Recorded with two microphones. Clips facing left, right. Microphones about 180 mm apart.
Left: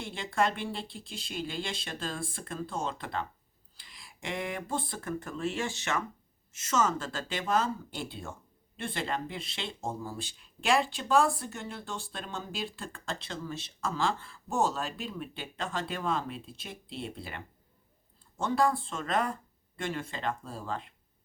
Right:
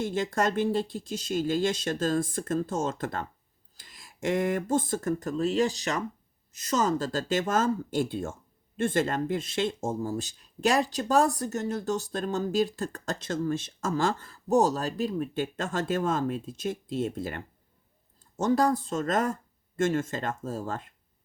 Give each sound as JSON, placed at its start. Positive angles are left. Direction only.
{"t": 0.0, "sound": "speech", "side_deg": -45}